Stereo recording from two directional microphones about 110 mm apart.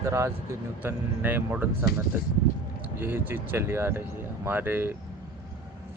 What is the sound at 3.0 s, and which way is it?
Speech, 20° right (ahead or behind).